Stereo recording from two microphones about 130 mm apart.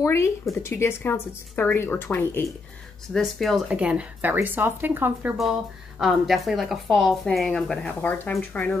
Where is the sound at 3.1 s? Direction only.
Centre (ahead or behind); by 5.3 s 15° right (ahead or behind).